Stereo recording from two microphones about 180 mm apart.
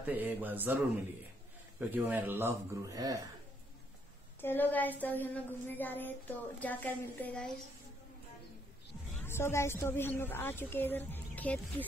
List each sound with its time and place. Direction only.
0.0 s speech: 10° right (ahead or behind)
4.4 s a woman's voice: 10° left (ahead or behind)
9.2 s a woman's voice: 15° left (ahead or behind)